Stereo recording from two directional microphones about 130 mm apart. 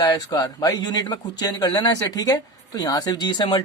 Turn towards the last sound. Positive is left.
turn(degrees=35)  # may be behind; listen again after turning